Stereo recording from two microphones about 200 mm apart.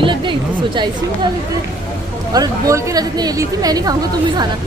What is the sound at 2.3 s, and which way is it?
A woman's voice, 15° right (ahead or behind).